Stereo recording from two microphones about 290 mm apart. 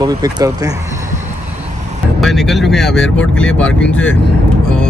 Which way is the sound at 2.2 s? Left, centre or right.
Centre.